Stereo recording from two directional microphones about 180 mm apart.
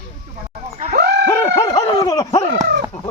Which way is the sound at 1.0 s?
60° right (ahead or behind).